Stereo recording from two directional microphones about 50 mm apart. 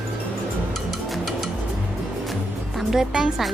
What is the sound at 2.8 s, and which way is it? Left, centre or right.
Speech, centre.